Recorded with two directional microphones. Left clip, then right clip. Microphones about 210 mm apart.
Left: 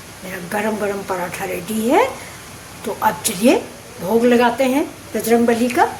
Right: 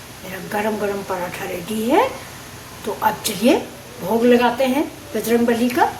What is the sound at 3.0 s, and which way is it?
A woman's voice, 20° left (ahead or behind).